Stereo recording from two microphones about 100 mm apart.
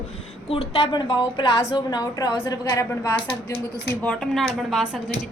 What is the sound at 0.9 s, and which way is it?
A woman's voice, 50° left (ahead or behind).